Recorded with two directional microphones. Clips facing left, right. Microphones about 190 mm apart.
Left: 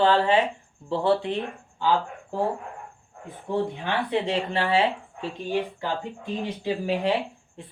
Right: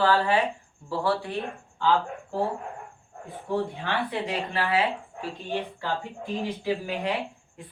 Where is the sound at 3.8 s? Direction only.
25° left (ahead or behind).